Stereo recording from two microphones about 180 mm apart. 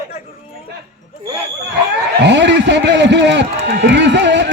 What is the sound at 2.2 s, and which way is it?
Run, 80° right.